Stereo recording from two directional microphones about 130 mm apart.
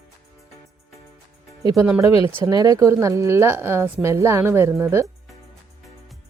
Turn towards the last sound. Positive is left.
turn(degrees=-20)  # may be behind; listen again after turning